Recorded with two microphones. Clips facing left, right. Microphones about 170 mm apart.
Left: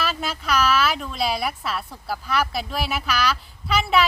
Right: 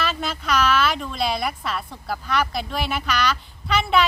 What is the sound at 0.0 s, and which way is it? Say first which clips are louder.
Speech: right 1 dB; 5° left (ahead or behind).